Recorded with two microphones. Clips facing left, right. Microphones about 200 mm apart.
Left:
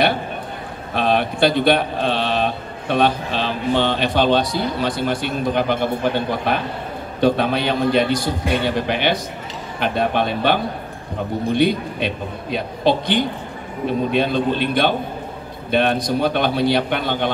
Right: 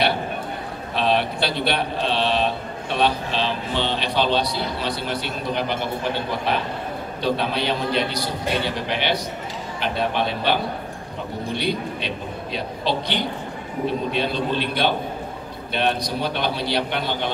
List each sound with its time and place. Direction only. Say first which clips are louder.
0.9 s a man's voice: left 3 dB; 50° left (ahead or behind)
7.2 s a man's voice: left 6 dB; 50° left (ahead or behind)